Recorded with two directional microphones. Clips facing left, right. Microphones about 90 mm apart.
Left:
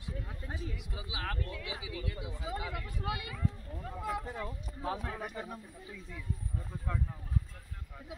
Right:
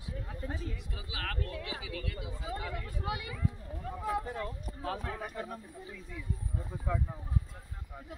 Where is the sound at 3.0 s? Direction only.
20° right (ahead or behind).